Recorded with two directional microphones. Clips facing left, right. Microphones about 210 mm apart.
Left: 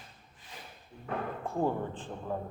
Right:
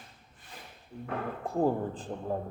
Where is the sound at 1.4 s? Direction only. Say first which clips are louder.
Right 4 dB; 35° right (ahead or behind).